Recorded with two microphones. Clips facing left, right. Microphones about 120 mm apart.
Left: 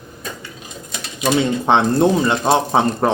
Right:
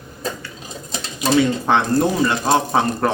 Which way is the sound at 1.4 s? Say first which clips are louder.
Left 1 dB; 25° left (ahead or behind).